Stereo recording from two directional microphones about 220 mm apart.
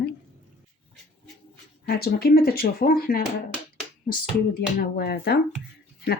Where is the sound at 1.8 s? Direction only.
45° left (ahead or behind).